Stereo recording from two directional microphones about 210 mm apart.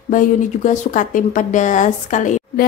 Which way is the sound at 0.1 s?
40° left (ahead or behind).